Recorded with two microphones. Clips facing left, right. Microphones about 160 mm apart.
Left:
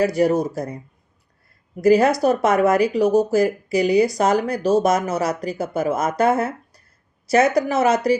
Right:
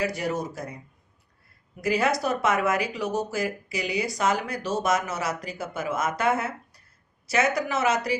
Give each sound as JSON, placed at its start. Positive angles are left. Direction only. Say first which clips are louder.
{"t": 0.0, "sound": "speech", "louder": "left 10 dB", "side_deg": 35}